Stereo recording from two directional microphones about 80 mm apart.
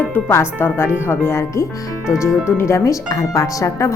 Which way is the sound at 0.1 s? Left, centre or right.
Left.